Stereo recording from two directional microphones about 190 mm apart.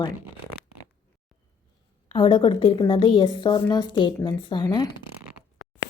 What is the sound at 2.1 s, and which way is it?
A woman's voice, 25° left (ahead or behind).